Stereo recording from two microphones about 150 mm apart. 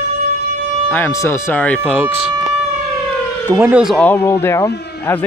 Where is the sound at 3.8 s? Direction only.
5° left (ahead or behind).